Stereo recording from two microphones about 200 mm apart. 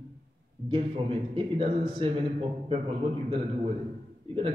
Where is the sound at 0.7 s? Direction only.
25° right (ahead or behind).